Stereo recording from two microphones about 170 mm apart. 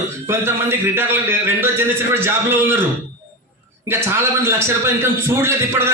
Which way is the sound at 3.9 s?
15° right (ahead or behind).